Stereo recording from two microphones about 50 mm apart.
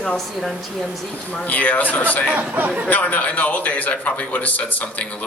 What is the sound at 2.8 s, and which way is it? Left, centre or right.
A man's voice, left.